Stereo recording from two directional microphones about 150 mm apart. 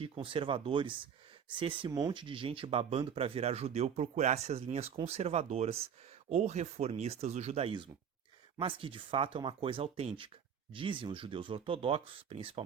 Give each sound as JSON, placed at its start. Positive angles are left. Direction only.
{"t": 0.0, "sound": "speech", "side_deg": -35}